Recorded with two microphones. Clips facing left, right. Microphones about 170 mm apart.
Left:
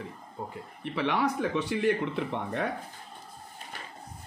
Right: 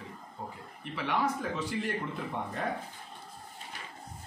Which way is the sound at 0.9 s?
65° left (ahead or behind).